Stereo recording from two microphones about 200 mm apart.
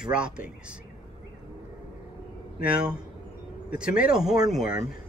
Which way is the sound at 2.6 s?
5° right (ahead or behind).